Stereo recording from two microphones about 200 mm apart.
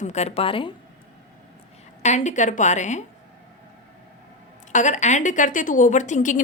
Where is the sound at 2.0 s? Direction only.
35° left (ahead or behind).